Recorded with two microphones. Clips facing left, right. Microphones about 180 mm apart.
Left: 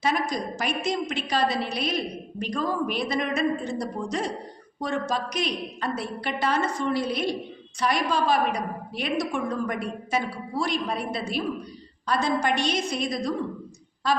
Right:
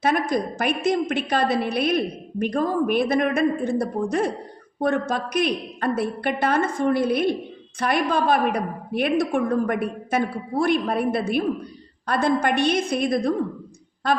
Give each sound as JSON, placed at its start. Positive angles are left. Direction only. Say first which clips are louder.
{"t": 0.0, "sound": "a woman's voice", "louder": "right 4 dB", "side_deg": -55}